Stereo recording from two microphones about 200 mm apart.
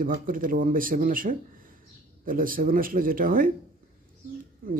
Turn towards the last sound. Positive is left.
turn(degrees=-45)  # may be behind; listen again after turning